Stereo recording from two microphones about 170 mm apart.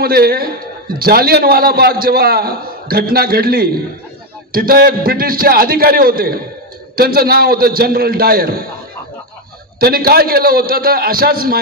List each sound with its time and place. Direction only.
0.0 s a man's voice: 65° right (ahead or behind)
9.8 s a man's voice: 60° right (ahead or behind)